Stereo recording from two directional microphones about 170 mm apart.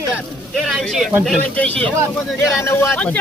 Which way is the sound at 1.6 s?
10° left (ahead or behind).